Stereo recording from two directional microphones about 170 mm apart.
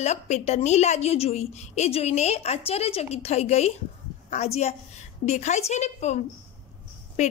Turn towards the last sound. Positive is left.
turn(degrees=40)  # may be behind; listen again after turning